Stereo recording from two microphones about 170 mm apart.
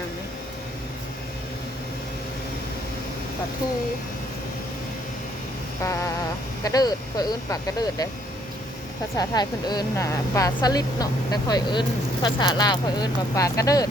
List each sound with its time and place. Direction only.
5.8 s speech: 20° left (ahead or behind)
9.1 s speech: 25° left (ahead or behind)